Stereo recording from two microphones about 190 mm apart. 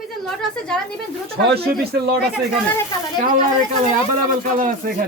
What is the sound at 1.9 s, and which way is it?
Speech, 60° right (ahead or behind).